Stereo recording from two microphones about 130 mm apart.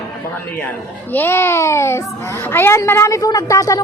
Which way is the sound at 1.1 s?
20° left (ahead or behind).